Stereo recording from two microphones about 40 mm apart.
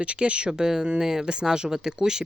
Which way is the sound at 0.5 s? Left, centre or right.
Centre.